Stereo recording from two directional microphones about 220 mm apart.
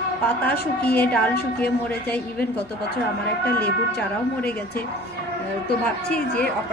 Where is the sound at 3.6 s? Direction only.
45° left (ahead or behind).